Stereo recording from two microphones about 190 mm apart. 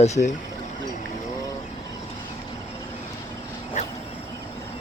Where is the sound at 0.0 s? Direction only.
35° left (ahead or behind).